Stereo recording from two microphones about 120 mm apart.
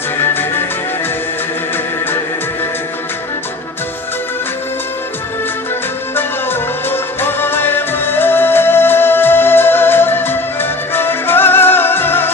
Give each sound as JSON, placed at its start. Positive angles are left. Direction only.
{"t": 0.2, "sound": "music", "side_deg": 20}
{"t": 1.7, "sound": "music", "side_deg": 20}
{"t": 6.1, "sound": "music", "side_deg": 20}